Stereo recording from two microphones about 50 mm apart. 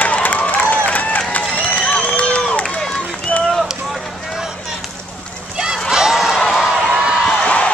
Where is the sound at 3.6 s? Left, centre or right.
Centre.